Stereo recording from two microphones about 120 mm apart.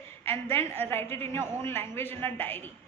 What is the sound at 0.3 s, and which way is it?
A woman's voice, 20° left (ahead or behind).